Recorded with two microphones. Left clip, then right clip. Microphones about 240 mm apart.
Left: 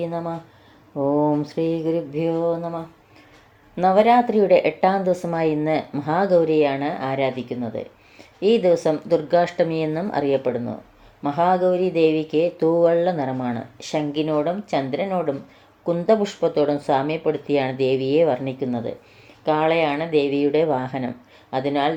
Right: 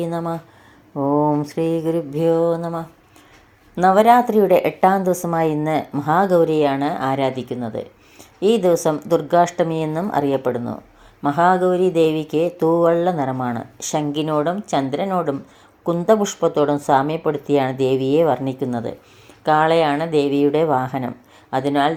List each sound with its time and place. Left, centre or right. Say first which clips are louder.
0.0 s speech: right 3 dB; right